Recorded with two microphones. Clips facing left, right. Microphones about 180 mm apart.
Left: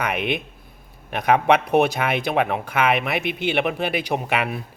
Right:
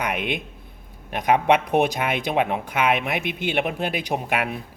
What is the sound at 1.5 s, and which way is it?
Speech, 15° right (ahead or behind).